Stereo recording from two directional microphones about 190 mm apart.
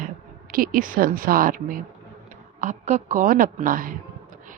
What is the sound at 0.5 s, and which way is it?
A woman's voice, 50° right (ahead or behind).